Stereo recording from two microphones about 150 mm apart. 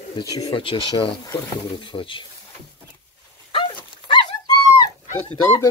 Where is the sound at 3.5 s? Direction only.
35° left (ahead or behind).